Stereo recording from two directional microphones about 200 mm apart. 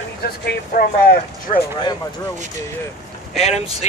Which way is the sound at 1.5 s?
20° left (ahead or behind).